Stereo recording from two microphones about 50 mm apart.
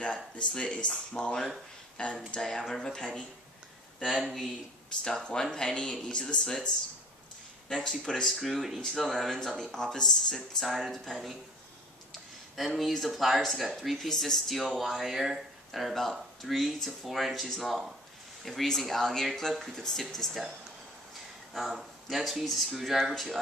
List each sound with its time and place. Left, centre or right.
0.0 s speech: left
4.0 s speech: centre
5.0 s speech: centre
7.8 s speech: centre
12.5 s speech: centre
21.5 s speech: centre